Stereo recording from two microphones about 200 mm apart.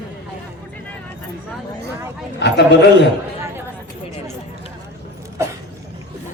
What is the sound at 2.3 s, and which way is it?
Speech, 60° left (ahead or behind).